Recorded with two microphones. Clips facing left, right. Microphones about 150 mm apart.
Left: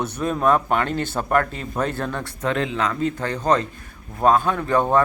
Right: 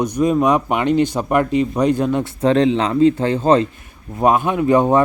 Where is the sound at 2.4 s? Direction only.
30° right (ahead or behind).